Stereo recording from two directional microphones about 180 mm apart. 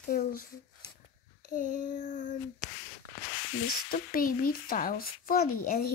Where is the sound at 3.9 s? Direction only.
50° left (ahead or behind).